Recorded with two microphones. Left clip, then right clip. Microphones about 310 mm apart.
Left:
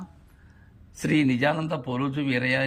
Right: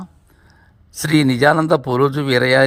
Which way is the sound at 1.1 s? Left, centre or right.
Centre.